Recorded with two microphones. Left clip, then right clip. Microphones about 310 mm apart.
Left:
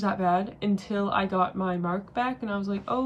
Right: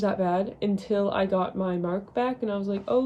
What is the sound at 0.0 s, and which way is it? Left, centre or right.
Speech, centre.